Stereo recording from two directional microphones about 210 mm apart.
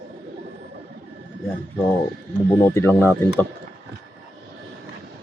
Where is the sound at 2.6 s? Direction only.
10° left (ahead or behind).